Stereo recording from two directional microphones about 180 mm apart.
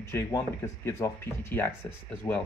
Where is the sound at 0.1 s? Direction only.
15° left (ahead or behind).